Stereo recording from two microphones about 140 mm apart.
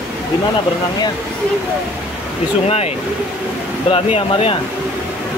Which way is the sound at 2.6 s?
50° left (ahead or behind).